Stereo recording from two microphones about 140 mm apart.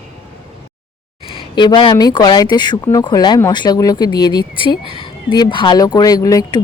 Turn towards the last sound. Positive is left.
turn(degrees=25)  # may be behind; listen again after turning